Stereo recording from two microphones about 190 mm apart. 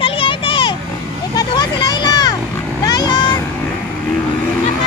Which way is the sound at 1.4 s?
20° left (ahead or behind).